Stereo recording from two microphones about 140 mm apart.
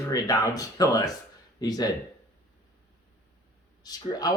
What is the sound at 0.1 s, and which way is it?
Speech, 25° left (ahead or behind).